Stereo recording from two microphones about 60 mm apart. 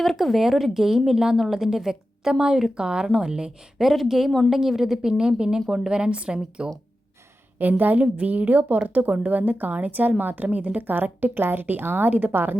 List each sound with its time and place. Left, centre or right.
0.0 s a woman's voice: centre
3.8 s a woman's voice: centre
7.6 s a woman's voice: right